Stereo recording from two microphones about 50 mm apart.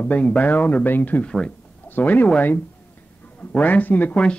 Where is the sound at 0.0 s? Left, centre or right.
Left.